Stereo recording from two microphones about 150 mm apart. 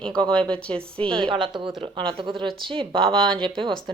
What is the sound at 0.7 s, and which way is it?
A woman's voice, 35° right (ahead or behind).